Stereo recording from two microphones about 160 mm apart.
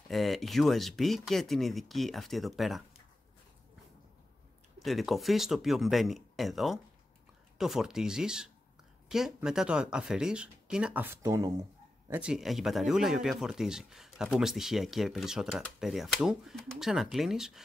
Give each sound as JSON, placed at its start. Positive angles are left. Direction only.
{"t": 0.1, "sound": "speech", "side_deg": 0}
{"t": 4.7, "sound": "speech", "side_deg": 0}
{"t": 12.1, "sound": "speech", "side_deg": -5}